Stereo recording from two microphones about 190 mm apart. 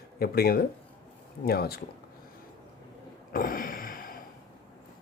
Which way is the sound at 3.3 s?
45° left (ahead or behind).